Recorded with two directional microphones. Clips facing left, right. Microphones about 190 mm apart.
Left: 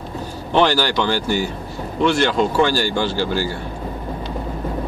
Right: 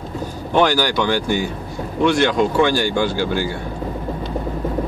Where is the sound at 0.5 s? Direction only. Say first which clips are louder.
Even; 10° right (ahead or behind).